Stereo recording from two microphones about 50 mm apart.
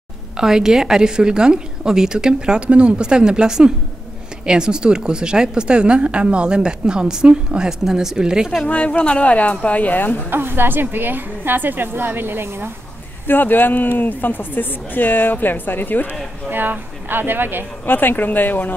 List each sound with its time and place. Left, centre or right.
0.4 s a woman's voice: centre
8.6 s speech: left
10.3 s a woman's voice: right
13.3 s speech: left
16.4 s a woman's voice: right
17.8 s speech: left